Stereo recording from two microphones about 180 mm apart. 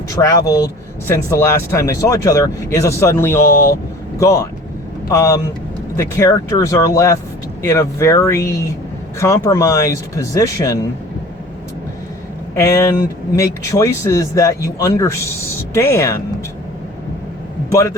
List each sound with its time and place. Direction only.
0.2 s a man's voice: 20° left (ahead or behind)
12.5 s speech: 15° left (ahead or behind)
17.7 s a man's voice: 15° left (ahead or behind)